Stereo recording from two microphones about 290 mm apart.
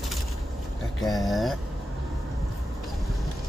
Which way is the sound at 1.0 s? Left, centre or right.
Centre.